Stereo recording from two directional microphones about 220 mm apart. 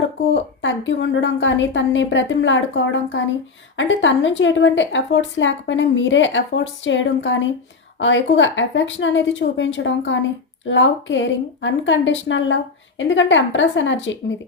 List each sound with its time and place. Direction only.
0.6 s a woman's voice: 60° left (ahead or behind)